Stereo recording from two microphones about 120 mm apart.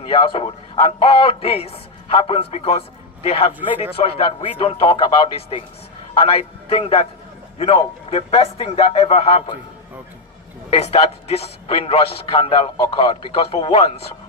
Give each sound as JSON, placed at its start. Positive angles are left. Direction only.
{"t": 0.0, "sound": "a man's voice", "side_deg": 50}
{"t": 10.7, "sound": "a man's voice", "side_deg": 60}